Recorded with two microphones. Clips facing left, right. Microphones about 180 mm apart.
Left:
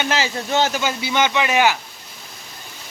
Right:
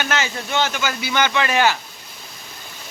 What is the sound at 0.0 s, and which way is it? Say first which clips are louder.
Speech: left 2 dB; 30° left (ahead or behind).